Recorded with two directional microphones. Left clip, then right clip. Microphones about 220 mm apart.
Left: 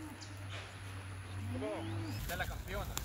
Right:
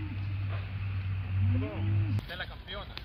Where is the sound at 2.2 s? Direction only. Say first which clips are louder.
Right 1 dB; 40° left (ahead or behind).